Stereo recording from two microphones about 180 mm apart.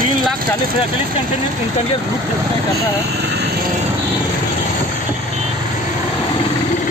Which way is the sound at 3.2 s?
70° right (ahead or behind).